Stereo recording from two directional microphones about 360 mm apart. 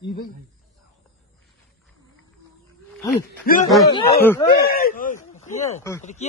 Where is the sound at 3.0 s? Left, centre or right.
Centre.